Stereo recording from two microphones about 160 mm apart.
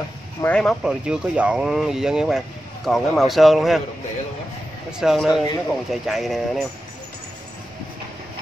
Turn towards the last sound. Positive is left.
turn(degrees=0)  # may be behind; listen again after turning